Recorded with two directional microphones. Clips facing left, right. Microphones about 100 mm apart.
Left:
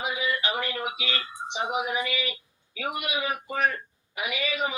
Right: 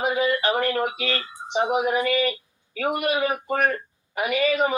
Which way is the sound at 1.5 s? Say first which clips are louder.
Right 7 dB; 45° right (ahead or behind).